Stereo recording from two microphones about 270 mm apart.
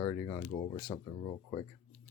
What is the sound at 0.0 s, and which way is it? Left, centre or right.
Speech, centre.